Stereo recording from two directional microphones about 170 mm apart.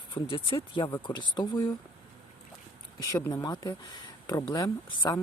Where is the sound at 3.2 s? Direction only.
15° left (ahead or behind).